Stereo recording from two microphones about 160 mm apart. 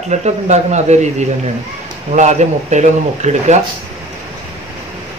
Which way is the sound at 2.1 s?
45° right (ahead or behind).